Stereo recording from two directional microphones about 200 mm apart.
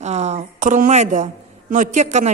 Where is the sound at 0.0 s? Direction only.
35° right (ahead or behind).